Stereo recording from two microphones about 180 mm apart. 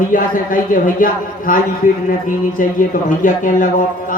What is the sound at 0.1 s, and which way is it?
A man's voice, 50° left (ahead or behind).